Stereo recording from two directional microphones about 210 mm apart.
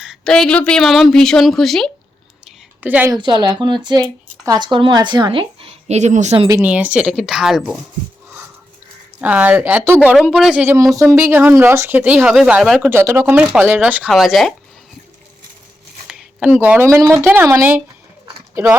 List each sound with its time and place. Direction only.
0.0 s a woman's voice: centre (ahead or behind)
3.2 s speech: 20° right (ahead or behind)
6.5 s a woman's voice: 5° right (ahead or behind)
9.2 s speech: 5° right (ahead or behind)
12.9 s speech: 10° right (ahead or behind)
16.0 s speech: 5° right (ahead or behind)